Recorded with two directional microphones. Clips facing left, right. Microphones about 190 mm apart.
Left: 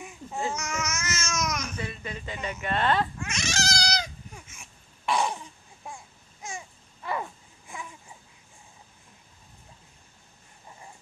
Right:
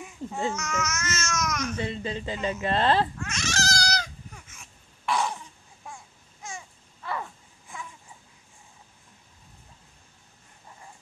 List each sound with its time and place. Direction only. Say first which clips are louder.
0.5 s babbling: right 1 dB; 15° left (ahead or behind)
1.8 s speech: right 5 dB; 25° right (ahead or behind)
3.2 s cat: right 1 dB; 15° left (ahead or behind)
6.4 s babbling: left 1 dB; 15° left (ahead or behind)